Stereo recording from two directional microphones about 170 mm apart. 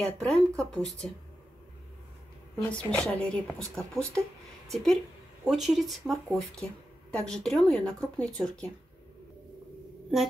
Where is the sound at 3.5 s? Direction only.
20° right (ahead or behind).